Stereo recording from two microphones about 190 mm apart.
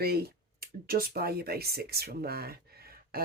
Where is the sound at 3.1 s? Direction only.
50° right (ahead or behind).